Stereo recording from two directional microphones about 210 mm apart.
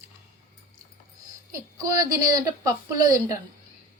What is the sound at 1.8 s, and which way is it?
A woman's voice, 15° right (ahead or behind).